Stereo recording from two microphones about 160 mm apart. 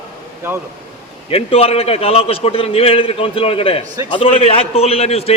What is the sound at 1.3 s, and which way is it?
A man's voice, 40° left (ahead or behind).